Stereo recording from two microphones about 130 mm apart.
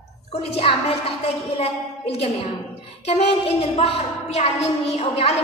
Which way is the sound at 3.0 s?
50° left (ahead or behind).